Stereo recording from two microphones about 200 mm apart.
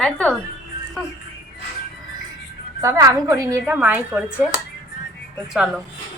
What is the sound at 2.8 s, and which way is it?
A woman's voice, 15° right (ahead or behind).